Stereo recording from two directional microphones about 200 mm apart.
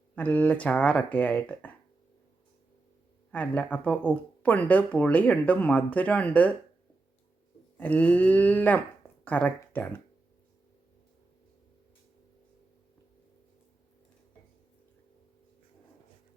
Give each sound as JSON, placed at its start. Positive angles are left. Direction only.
{"t": 0.2, "sound": "speech", "side_deg": 10}
{"t": 3.3, "sound": "speech", "side_deg": 5}
{"t": 7.8, "sound": "speech", "side_deg": 10}